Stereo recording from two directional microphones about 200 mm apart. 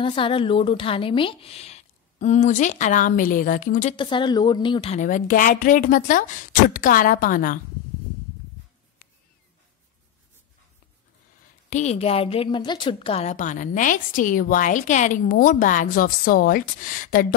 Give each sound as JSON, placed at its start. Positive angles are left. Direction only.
{"t": 0.0, "sound": "a woman's voice", "side_deg": 25}
{"t": 3.9, "sound": "a woman's voice", "side_deg": 25}
{"t": 11.7, "sound": "a woman's voice", "side_deg": 35}